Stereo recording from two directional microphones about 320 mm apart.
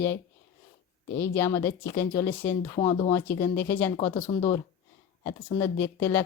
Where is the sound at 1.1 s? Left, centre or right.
Centre.